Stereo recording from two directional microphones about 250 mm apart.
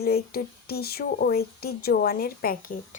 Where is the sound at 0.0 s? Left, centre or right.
Left.